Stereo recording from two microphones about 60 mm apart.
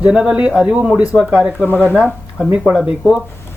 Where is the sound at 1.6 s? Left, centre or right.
Left.